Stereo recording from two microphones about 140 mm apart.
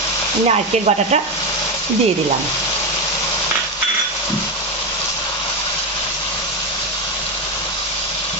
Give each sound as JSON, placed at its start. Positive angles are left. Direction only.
{"t": 0.5, "sound": "sizzle", "side_deg": -50}